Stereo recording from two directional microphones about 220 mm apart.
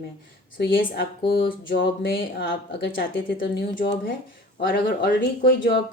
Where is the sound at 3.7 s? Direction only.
45° left (ahead or behind).